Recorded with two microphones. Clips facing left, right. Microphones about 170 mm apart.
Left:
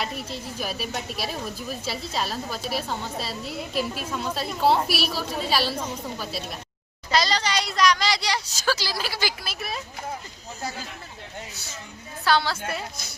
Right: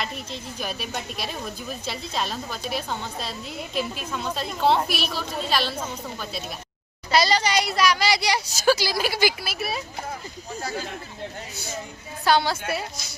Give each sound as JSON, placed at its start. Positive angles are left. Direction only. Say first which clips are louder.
{"t": 0.0, "sound": "a woman's voice", "louder": "left 1 dB", "side_deg": 5}
{"t": 7.1, "sound": "speech", "louder": "right 3 dB", "side_deg": -10}
{"t": 12.2, "sound": "speech", "louder": "right 2 dB", "side_deg": -15}